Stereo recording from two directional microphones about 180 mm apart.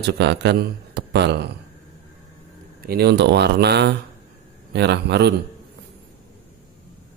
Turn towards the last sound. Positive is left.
turn(degrees=-70)  # may be behind; listen again after turning